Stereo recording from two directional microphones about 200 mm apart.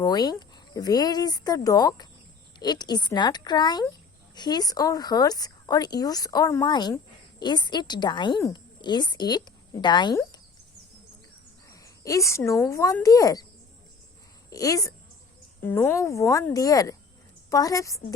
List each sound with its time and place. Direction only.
0.0 s a woman's voice: 20° left (ahead or behind)
11.7 s speech: 15° left (ahead or behind)
14.5 s a woman's voice: 15° left (ahead or behind)